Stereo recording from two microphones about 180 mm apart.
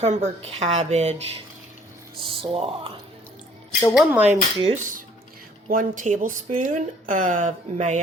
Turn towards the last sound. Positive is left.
turn(degrees=-40)  # may be behind; listen again after turning